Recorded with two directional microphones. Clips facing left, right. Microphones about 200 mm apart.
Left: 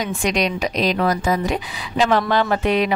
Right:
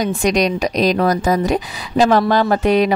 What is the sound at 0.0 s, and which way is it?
Speech, 40° right (ahead or behind).